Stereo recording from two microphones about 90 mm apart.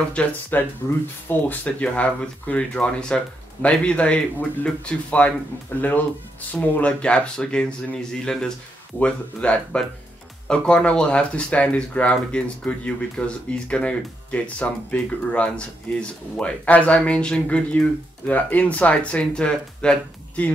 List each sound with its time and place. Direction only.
0.1 s speech: 15° left (ahead or behind)